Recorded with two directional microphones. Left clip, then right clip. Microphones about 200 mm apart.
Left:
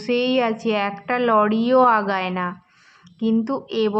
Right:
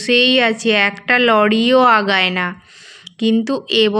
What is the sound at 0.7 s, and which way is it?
A woman's voice, 20° right (ahead or behind).